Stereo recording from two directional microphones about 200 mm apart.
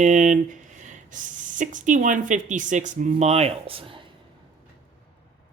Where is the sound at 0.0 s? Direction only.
40° right (ahead or behind).